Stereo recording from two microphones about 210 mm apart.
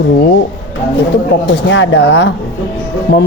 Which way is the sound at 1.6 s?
60° left (ahead or behind).